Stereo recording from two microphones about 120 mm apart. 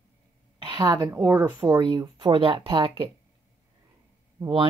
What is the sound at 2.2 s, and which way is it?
Speech, 50° right (ahead or behind).